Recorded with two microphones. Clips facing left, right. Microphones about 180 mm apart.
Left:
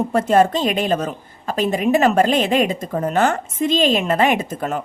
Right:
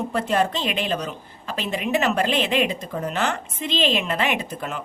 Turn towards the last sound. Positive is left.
turn(degrees=45)  # may be behind; listen again after turning